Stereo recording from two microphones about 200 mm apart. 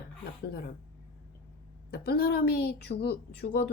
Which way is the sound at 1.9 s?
50° left (ahead or behind).